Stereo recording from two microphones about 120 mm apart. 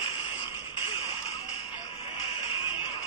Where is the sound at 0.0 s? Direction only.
45° left (ahead or behind).